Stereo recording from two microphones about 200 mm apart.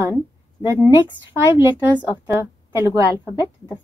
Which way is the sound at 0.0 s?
10° right (ahead or behind).